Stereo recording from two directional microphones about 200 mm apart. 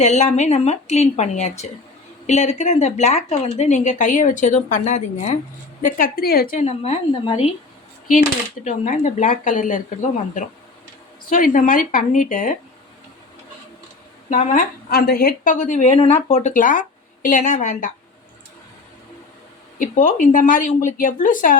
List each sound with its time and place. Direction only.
0.0 s speech: 35° left (ahead or behind)
5.8 s speech: 45° left (ahead or behind); by 7.5 s 30° left (ahead or behind)
8.6 s speech: 35° left (ahead or behind)
14.3 s speech: 40° left (ahead or behind)
19.8 s speech: 40° left (ahead or behind)